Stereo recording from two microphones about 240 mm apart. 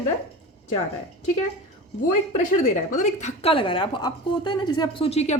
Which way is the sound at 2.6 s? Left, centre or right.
Left.